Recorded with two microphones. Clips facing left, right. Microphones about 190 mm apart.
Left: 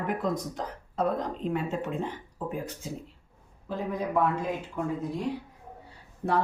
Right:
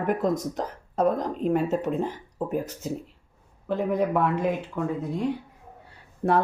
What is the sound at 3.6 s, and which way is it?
Speech, 65° right (ahead or behind).